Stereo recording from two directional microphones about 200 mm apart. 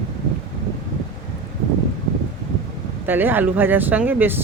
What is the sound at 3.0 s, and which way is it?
Speech, 10° right (ahead or behind).